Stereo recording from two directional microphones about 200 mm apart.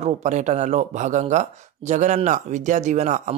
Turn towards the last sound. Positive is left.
turn(degrees=-35)  # may be behind; listen again after turning